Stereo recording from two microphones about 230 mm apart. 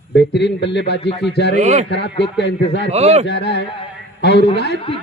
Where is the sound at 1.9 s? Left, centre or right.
Left.